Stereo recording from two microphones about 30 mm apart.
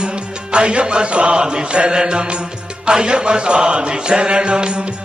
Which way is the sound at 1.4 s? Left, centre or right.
Right.